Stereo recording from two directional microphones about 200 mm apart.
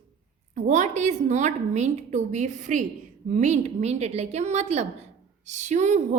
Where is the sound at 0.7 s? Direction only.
35° right (ahead or behind).